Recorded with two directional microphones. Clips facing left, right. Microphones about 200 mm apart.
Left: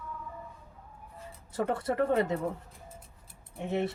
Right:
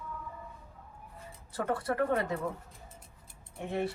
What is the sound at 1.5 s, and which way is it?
Speech, 20° left (ahead or behind).